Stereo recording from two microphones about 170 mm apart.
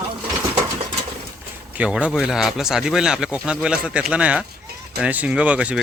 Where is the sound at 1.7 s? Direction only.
5° right (ahead or behind).